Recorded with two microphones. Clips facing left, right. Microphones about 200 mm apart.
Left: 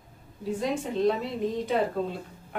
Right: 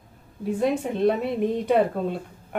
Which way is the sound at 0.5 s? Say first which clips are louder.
Right 4 dB; 55° right (ahead or behind).